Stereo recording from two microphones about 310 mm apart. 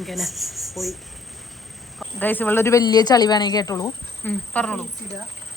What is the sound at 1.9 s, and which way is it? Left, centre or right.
Speech, centre.